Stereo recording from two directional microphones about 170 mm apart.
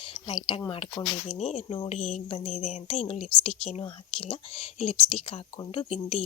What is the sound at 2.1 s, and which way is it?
A woman's voice, 45° left (ahead or behind).